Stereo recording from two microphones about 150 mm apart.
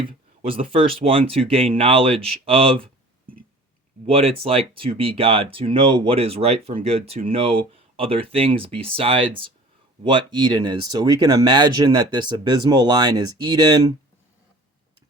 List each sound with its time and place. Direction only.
0.0 s speech: 35° right (ahead or behind)
4.0 s speech: 40° right (ahead or behind)